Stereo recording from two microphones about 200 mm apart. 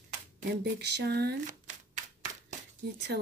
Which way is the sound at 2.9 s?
55° right (ahead or behind).